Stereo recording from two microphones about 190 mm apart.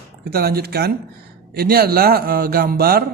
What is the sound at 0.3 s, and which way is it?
A man's voice, 55° right (ahead or behind).